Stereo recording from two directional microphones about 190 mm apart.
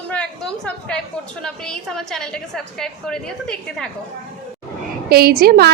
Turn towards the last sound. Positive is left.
turn(degrees=-55)  # may be behind; listen again after turning